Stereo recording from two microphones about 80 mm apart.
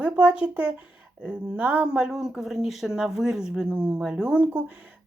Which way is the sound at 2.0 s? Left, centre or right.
Centre.